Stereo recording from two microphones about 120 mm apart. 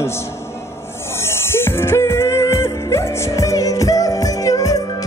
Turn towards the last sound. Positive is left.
turn(degrees=30)  # may be behind; listen again after turning